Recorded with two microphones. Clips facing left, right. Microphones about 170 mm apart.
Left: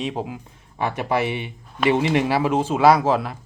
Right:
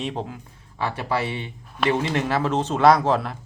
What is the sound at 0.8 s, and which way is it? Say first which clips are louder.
Speech: left 3 dB; 20° left (ahead or behind).